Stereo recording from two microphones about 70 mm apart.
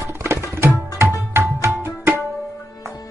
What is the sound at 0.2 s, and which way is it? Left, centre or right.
Tabla, right.